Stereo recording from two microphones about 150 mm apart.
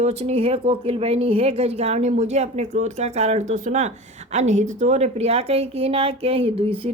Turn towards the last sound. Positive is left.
turn(degrees=-40)  # may be behind; listen again after turning